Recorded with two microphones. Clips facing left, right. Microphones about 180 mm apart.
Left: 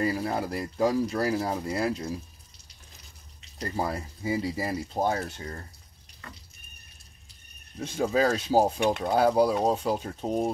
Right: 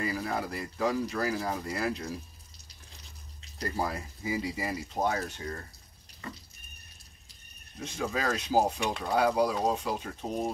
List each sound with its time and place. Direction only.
0.0 s speech: 30° left (ahead or behind)
3.5 s speech: 30° left (ahead or behind)
7.8 s speech: 30° left (ahead or behind)